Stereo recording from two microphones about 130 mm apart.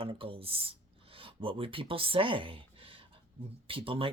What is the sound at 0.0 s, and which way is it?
Speech, 45° right (ahead or behind).